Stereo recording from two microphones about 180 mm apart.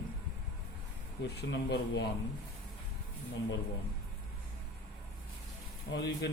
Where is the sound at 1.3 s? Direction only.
65° left (ahead or behind).